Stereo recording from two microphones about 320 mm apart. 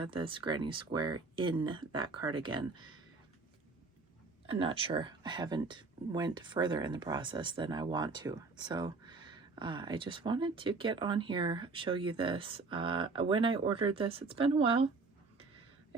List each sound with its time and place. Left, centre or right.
0.0 s speech: centre
4.4 s speech: centre